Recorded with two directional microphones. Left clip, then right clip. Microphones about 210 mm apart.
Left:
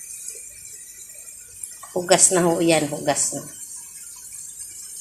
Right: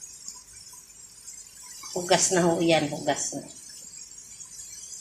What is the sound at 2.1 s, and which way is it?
A woman's voice, 25° left (ahead or behind).